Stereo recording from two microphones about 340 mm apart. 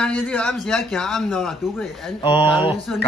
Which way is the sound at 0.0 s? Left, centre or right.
Centre.